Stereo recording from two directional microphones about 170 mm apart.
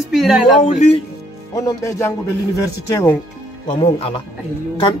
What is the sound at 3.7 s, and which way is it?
Speech, 35° left (ahead or behind).